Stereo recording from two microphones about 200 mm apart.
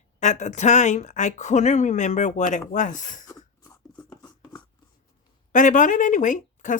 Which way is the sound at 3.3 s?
15° left (ahead or behind).